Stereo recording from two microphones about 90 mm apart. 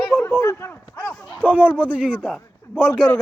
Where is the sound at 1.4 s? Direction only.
15° right (ahead or behind).